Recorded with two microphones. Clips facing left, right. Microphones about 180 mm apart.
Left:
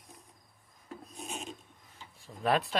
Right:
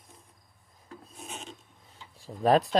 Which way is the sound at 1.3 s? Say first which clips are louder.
Left 2 dB; 5° left (ahead or behind).